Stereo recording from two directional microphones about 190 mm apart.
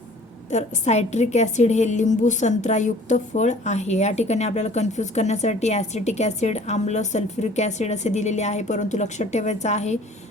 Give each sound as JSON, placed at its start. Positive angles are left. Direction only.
{"t": 0.5, "sound": "a woman's voice", "side_deg": 35}